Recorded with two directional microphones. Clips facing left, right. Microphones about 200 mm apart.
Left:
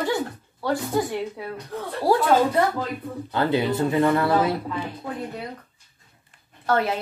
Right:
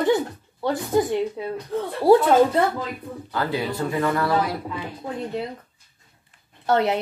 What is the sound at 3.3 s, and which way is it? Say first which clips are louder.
Speech: left 4 dB; 25° left (ahead or behind).